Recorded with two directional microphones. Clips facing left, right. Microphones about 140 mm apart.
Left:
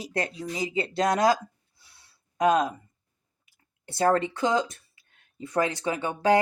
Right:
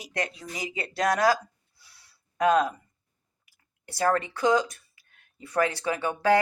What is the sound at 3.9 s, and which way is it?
Speech, 25° left (ahead or behind).